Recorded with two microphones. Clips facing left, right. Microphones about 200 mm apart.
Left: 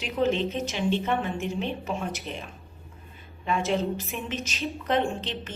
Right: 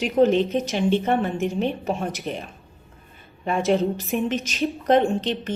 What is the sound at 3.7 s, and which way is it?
Speech, 50° right (ahead or behind).